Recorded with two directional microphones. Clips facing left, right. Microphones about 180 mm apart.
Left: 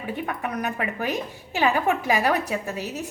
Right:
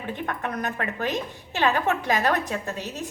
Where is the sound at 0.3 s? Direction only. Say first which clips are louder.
Even; 10° left (ahead or behind).